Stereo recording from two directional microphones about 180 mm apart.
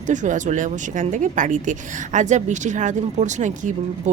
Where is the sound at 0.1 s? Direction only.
45° right (ahead or behind).